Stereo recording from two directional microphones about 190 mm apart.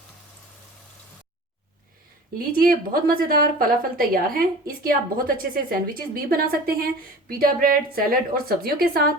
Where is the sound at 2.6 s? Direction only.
50° right (ahead or behind).